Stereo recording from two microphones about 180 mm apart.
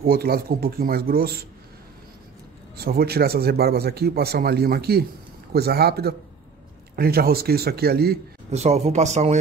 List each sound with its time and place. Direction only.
0.0 s speech: 55° right (ahead or behind)
2.8 s speech: 60° right (ahead or behind)
8.5 s speech: 35° right (ahead or behind)